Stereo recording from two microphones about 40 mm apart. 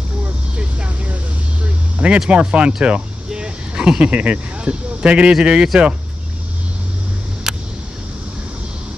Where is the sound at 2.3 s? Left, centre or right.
Right.